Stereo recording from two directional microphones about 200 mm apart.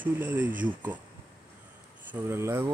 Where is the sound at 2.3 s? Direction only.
10° right (ahead or behind).